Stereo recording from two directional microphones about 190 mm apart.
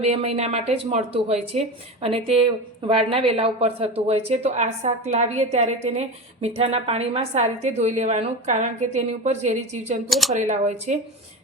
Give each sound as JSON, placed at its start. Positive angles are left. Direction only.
{"t": 0.0, "sound": "a woman's voice", "side_deg": -35}
{"t": 10.1, "sound": "speech", "side_deg": 0}
{"t": 10.3, "sound": "a woman's voice", "side_deg": -40}